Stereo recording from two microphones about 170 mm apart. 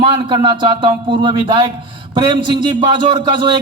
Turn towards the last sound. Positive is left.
turn(degrees=-25)  # may be behind; listen again after turning